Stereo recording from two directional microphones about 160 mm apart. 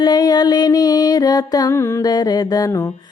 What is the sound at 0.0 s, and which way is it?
Music, 25° left (ahead or behind).